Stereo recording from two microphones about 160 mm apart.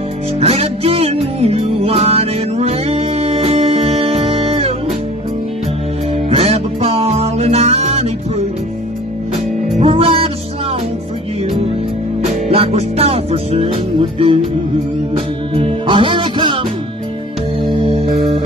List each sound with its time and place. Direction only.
0.4 s music: 40° right (ahead or behind)
6.1 s music: 35° right (ahead or behind)
9.8 s music: 40° right (ahead or behind)
12.3 s music: 40° right (ahead or behind)
17.6 s music: 35° right (ahead or behind)